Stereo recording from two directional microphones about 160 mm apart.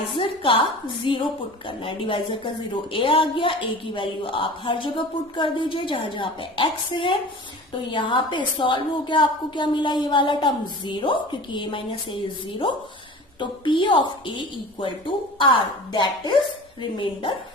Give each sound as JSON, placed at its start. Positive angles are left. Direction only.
{"t": 0.2, "sound": "a woman's voice", "side_deg": 35}